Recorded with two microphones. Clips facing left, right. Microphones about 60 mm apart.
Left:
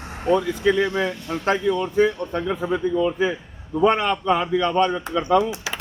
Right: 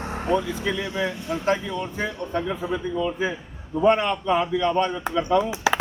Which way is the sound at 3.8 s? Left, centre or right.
Left.